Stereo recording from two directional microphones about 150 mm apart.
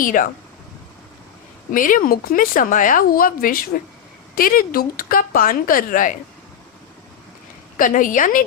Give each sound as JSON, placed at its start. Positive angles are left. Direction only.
{"t": 0.0, "sound": "a woman's voice", "side_deg": 65}
{"t": 1.7, "sound": "speech", "side_deg": 65}
{"t": 7.8, "sound": "a woman's voice", "side_deg": 60}